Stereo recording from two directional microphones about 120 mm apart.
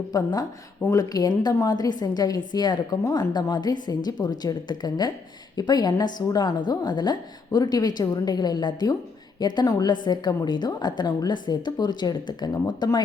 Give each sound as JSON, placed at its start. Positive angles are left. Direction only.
{"t": 0.1, "sound": "a woman's voice", "side_deg": 30}